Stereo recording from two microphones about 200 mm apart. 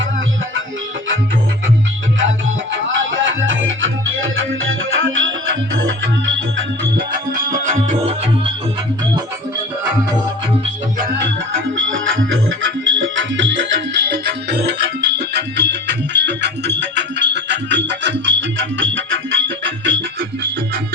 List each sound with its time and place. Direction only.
3.2 s music: 70° right (ahead or behind)
7.6 s music: 35° right (ahead or behind)
11.9 s music: 75° right (ahead or behind)